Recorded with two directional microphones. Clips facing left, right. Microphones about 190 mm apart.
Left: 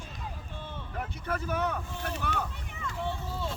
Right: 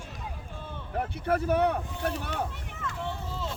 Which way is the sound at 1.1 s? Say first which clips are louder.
Right 7 dB; 60° right (ahead or behind).